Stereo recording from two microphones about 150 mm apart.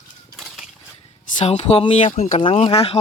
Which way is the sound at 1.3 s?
50° left (ahead or behind).